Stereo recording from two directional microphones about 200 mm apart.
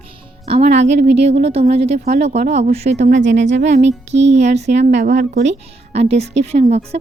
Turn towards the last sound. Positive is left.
turn(degrees=-30)  # may be behind; listen again after turning